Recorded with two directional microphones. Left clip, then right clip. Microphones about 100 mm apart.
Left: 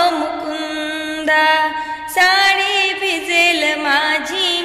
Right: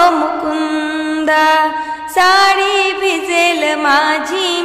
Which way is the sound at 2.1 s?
60° right (ahead or behind).